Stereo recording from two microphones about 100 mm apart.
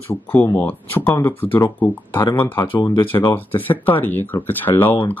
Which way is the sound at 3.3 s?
20° left (ahead or behind).